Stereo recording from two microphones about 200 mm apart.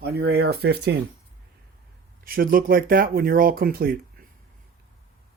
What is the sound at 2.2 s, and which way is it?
Speech, 45° right (ahead or behind).